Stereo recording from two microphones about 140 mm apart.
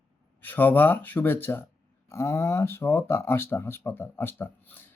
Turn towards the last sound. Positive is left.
turn(degrees=15)  # may be behind; listen again after turning